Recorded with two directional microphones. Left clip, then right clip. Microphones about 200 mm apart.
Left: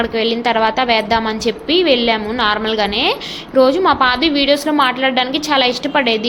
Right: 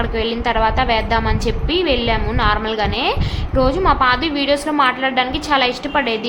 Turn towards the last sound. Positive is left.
turn(degrees=10)  # may be behind; listen again after turning